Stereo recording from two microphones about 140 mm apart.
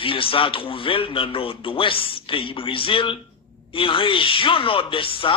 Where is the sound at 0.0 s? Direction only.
40° left (ahead or behind).